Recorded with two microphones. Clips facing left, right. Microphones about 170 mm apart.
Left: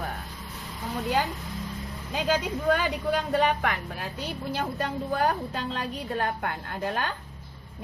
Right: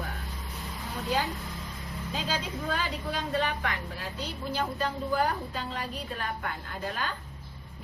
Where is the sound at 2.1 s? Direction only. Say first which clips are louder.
Left 7 dB; 60° left (ahead or behind).